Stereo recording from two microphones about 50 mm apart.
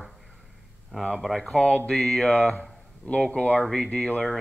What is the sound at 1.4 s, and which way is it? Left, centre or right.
Speech, centre.